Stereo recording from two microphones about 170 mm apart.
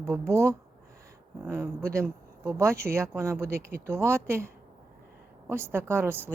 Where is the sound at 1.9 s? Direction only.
15° right (ahead or behind).